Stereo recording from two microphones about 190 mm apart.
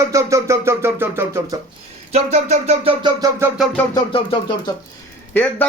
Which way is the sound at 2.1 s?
35° right (ahead or behind).